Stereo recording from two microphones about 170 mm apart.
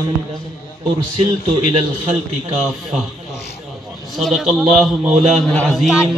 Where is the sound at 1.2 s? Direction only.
35° right (ahead or behind).